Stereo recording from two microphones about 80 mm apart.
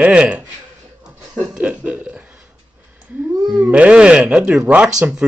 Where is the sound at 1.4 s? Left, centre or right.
Centre.